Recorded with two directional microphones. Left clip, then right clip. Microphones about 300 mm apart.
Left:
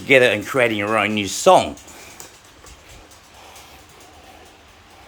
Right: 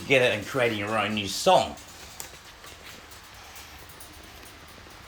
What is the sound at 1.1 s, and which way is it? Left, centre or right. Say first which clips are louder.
Speech: left 6 dB; centre.